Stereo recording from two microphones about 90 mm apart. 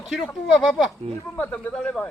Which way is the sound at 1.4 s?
20° left (ahead or behind).